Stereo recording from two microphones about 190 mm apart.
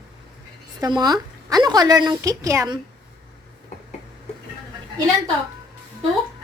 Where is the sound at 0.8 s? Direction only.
20° right (ahead or behind).